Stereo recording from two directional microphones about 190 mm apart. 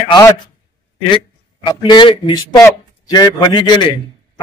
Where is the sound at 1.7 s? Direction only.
25° left (ahead or behind).